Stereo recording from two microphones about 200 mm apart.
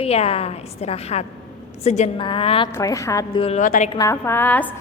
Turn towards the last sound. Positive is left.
turn(degrees=10)  # may be behind; listen again after turning